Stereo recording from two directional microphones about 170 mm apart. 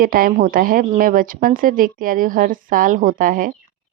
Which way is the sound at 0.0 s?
55° right (ahead or behind).